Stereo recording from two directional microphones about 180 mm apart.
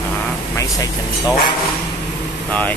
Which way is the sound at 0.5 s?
20° left (ahead or behind).